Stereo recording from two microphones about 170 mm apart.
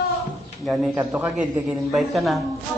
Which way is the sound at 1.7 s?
Centre (ahead or behind).